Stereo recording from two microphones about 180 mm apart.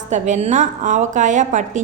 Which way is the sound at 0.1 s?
40° right (ahead or behind).